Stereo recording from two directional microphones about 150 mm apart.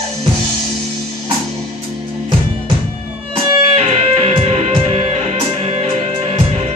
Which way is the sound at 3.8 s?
45° right (ahead or behind).